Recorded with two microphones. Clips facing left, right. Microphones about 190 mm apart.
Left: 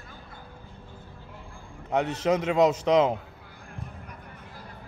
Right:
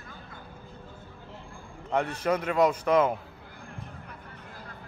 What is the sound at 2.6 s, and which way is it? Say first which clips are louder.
Speech: left 1 dB; 25° left (ahead or behind).